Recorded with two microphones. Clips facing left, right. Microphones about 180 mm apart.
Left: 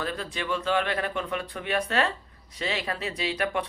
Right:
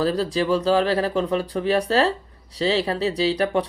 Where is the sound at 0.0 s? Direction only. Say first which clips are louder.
Right 11 dB; 35° right (ahead or behind).